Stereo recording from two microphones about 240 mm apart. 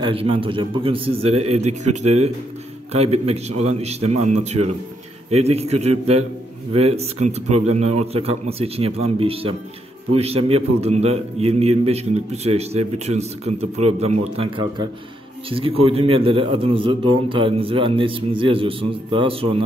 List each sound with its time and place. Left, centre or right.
0.0 s a man's voice: right